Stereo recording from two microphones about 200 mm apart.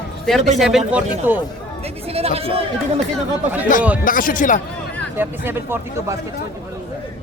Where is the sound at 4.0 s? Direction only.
45° left (ahead or behind).